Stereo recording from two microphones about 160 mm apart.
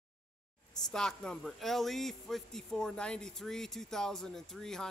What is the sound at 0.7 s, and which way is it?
A man's voice, 5° left (ahead or behind).